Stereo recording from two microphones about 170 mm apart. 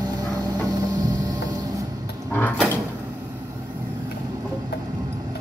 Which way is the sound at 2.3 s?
10° left (ahead or behind).